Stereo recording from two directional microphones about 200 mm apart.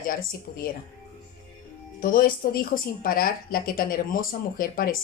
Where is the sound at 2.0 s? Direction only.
45° left (ahead or behind).